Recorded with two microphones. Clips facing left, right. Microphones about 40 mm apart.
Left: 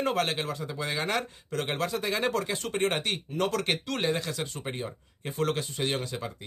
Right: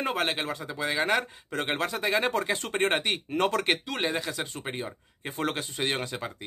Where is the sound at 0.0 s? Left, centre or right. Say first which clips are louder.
Left 1 dB; centre.